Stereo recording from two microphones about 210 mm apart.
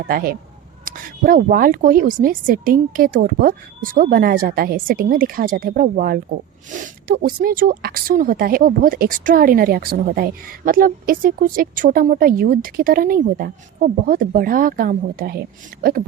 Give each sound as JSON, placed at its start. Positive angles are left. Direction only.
{"t": 0.1, "sound": "speech", "side_deg": -45}